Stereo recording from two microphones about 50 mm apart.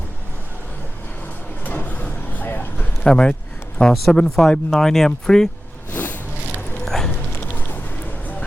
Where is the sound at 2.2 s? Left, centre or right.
Left.